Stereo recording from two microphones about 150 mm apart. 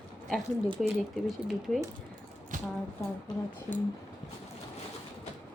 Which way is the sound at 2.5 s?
60° right (ahead or behind).